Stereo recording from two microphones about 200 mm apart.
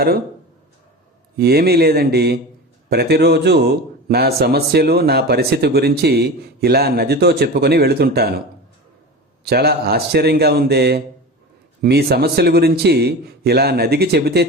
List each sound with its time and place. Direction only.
1.4 s a man's voice: 50° right (ahead or behind)
9.4 s a man's voice: 50° right (ahead or behind)